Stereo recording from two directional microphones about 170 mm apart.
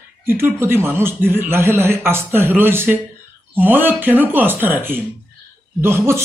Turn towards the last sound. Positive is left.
turn(degrees=-15)  # may be behind; listen again after turning